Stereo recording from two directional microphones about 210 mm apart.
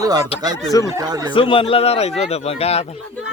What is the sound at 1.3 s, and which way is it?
Speech, 25° left (ahead or behind).